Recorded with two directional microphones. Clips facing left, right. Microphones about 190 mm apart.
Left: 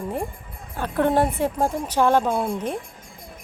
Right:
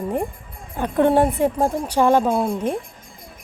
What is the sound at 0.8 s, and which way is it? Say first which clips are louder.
Speech: right 4 dB; 15° right (ahead or behind).